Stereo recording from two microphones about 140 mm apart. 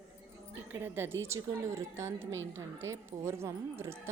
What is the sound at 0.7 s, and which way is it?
A woman's voice, 15° right (ahead or behind).